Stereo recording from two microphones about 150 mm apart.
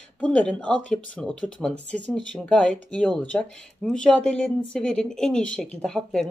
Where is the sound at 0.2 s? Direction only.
10° left (ahead or behind).